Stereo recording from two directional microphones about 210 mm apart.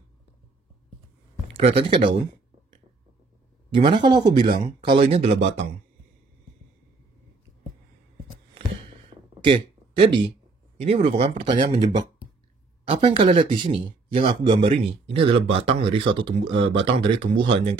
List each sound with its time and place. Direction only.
1.5 s speech: 25° right (ahead or behind)
3.7 s speech: 25° right (ahead or behind)
9.1 s a sound: 25° right (ahead or behind)
10.8 s speech: 30° right (ahead or behind)